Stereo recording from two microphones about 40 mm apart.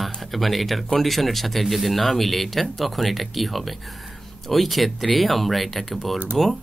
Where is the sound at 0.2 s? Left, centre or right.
Centre.